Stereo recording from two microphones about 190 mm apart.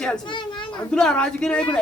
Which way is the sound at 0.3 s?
25° left (ahead or behind).